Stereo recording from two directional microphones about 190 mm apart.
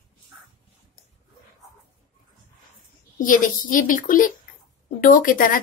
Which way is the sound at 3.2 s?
45° left (ahead or behind).